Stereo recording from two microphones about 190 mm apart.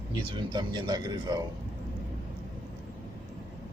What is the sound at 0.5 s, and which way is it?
Speech, 20° right (ahead or behind).